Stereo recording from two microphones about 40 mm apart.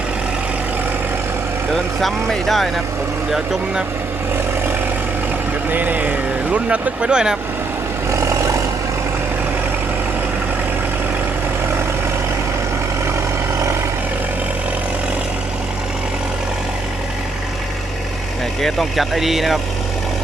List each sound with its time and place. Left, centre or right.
1.7 s speech: centre
5.7 s speech: right
18.6 s speech: centre
19.1 s speech: centre